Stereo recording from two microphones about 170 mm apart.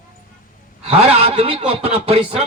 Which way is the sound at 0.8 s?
35° right (ahead or behind).